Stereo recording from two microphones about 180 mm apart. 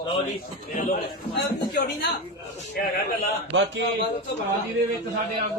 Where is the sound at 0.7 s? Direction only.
50° left (ahead or behind).